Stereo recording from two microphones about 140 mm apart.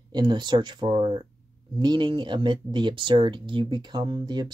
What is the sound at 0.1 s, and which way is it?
Speech, 30° right (ahead or behind).